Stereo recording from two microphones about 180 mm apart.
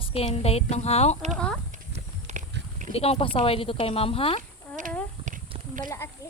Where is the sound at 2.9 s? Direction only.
35° left (ahead or behind).